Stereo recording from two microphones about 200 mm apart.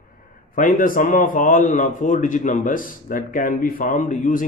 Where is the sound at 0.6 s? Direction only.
40° left (ahead or behind).